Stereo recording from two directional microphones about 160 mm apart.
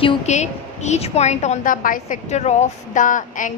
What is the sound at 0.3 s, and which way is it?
A woman's voice, 45° left (ahead or behind).